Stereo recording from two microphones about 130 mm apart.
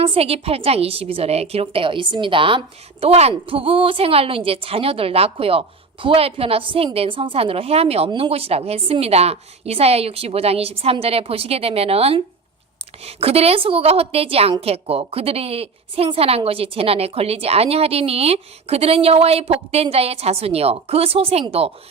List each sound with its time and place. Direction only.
0.0 s a woman's voice: 50° right (ahead or behind)